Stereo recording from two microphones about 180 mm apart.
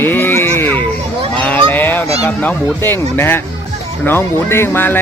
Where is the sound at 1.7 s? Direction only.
10° left (ahead or behind).